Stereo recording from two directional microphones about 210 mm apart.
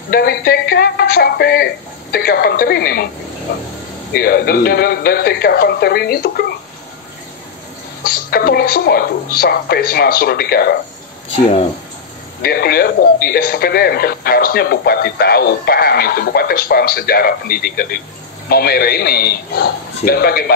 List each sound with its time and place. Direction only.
0.1 s speech: 50° left (ahead or behind)
4.1 s speech: 45° left (ahead or behind)
8.0 s speech: 45° left (ahead or behind)
12.4 s speech: 45° left (ahead or behind)